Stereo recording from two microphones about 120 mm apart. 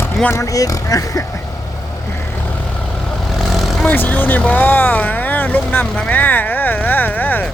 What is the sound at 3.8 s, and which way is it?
Speech, 15° left (ahead or behind).